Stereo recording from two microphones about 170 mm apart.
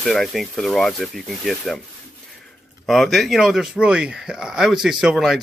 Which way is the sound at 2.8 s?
Centre (ahead or behind).